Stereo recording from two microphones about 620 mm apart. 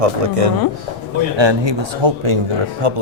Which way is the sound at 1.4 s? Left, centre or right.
Right.